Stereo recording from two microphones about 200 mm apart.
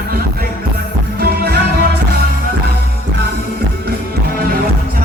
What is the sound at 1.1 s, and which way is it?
Music, 50° right (ahead or behind).